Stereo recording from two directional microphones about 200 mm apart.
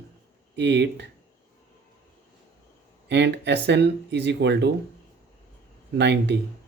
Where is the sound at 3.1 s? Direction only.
60° right (ahead or behind).